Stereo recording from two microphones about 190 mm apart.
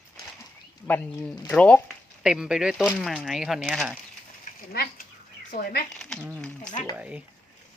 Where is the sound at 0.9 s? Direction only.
10° left (ahead or behind).